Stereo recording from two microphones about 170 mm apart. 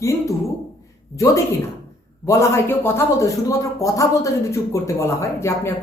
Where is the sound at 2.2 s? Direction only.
15° left (ahead or behind).